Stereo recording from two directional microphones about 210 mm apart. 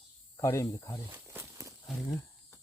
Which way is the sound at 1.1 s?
10° right (ahead or behind).